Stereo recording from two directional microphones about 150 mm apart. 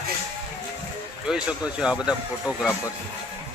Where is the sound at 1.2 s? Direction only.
5° right (ahead or behind).